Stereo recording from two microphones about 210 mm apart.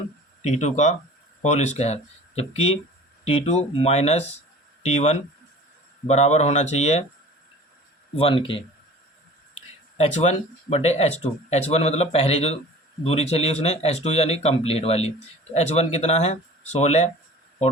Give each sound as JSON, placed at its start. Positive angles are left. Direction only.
{"t": 0.6, "sound": "speech", "side_deg": 35}
{"t": 8.1, "sound": "speech", "side_deg": 25}
{"t": 10.0, "sound": "speech", "side_deg": 35}